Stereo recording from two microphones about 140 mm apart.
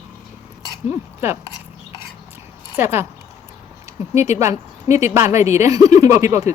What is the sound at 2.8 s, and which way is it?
Speech, 15° right (ahead or behind).